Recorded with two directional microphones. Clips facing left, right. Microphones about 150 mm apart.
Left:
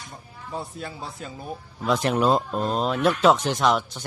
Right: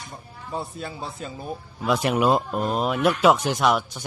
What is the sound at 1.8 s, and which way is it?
Speech, 10° right (ahead or behind).